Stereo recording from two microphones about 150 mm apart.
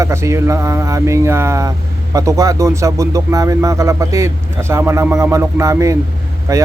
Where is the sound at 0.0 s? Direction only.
20° right (ahead or behind).